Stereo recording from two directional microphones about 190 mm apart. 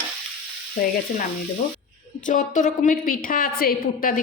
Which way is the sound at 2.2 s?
40° left (ahead or behind).